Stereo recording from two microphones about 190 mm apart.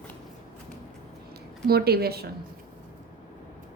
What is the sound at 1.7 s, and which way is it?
Speech, 55° right (ahead or behind).